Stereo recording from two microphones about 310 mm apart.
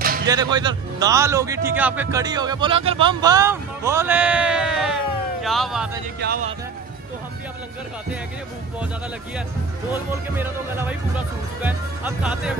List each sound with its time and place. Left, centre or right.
0.3 s a man's voice: centre
6.1 s speech: right
10.3 s a man's voice: centre